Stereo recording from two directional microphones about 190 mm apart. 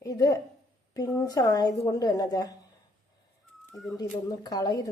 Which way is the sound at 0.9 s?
15° left (ahead or behind).